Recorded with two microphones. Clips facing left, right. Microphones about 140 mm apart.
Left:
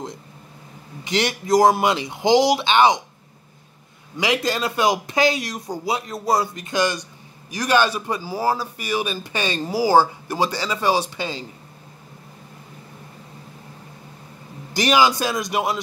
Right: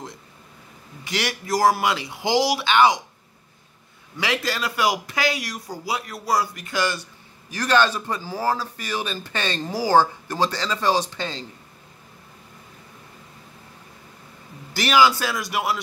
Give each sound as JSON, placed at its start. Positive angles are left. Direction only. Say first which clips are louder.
{"t": 1.0, "sound": "speech", "louder": "left 5 dB", "side_deg": 20}
{"t": 4.2, "sound": "speech", "louder": "left 4 dB", "side_deg": 20}
{"t": 14.7, "sound": "speech", "louder": "left 1 dB", "side_deg": 20}